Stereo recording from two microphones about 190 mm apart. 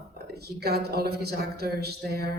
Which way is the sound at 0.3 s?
55° right (ahead or behind).